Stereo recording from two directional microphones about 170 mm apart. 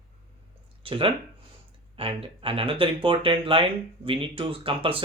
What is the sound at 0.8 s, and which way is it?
Speech, 30° right (ahead or behind).